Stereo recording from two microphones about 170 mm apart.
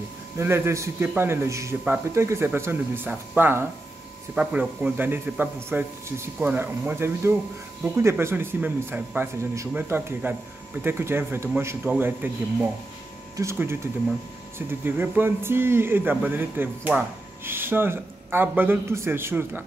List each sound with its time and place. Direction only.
0.4 s speech: 15° right (ahead or behind)
14.9 s speech: 10° right (ahead or behind)